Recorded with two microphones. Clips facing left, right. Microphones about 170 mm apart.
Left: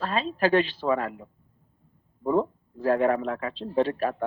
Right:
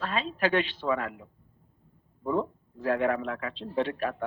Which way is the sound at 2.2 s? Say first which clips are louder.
Left 4 dB; 35° left (ahead or behind).